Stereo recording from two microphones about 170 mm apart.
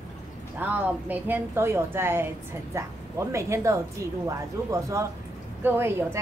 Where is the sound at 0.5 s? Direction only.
10° right (ahead or behind).